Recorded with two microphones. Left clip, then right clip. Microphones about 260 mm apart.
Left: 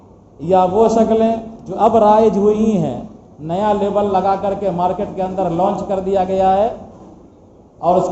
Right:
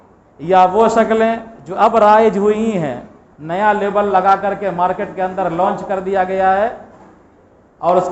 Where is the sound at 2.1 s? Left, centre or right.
Right.